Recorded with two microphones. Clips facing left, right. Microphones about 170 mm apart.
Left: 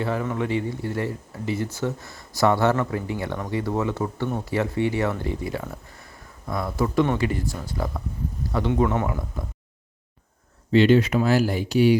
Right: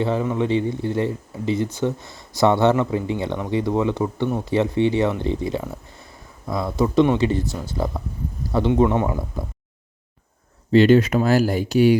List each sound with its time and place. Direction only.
0.0 s speech: 20° right (ahead or behind)
10.7 s speech: 45° right (ahead or behind)